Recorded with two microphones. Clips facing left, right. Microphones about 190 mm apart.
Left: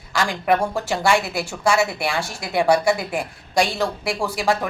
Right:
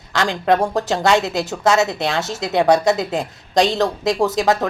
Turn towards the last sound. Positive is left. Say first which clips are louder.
# right 5 dB
turn(degrees=-20)  # may be behind; listen again after turning